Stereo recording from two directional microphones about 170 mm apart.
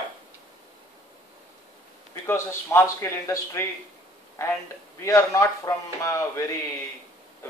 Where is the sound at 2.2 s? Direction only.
15° left (ahead or behind).